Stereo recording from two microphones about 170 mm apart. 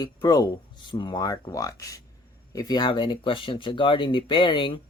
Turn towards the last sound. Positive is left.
turn(degrees=30)  # may be behind; listen again after turning